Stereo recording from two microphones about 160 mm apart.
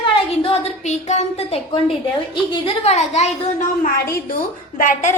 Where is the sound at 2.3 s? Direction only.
30° left (ahead or behind).